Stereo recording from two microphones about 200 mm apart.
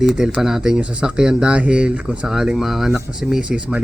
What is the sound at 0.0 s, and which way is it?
Speech, 5° right (ahead or behind).